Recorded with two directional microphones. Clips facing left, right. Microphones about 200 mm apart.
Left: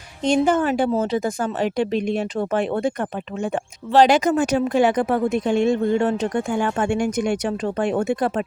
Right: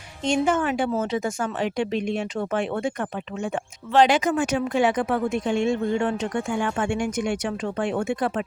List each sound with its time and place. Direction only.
0.3 s a woman's voice: 35° left (ahead or behind)